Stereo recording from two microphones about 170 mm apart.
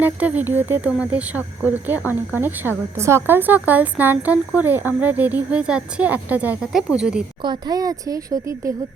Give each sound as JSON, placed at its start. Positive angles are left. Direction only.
{"t": 0.0, "sound": "speech", "side_deg": -10}
{"t": 7.4, "sound": "speech", "side_deg": -25}